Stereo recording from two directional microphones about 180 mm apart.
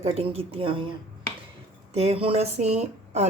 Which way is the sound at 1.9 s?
35° right (ahead or behind).